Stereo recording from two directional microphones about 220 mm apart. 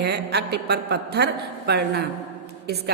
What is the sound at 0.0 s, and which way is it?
A woman's voice, 50° right (ahead or behind).